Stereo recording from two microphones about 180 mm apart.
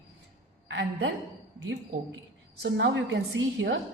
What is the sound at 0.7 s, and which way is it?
Speech, 80° right.